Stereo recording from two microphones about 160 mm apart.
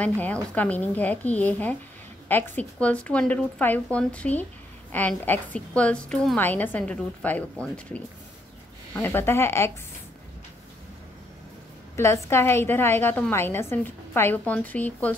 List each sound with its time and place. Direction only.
0.0 s a woman's voice: 10° left (ahead or behind)
12.0 s a woman's voice: 15° left (ahead or behind)